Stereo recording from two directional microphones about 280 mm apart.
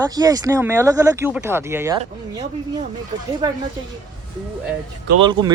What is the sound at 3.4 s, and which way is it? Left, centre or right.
Speech, centre.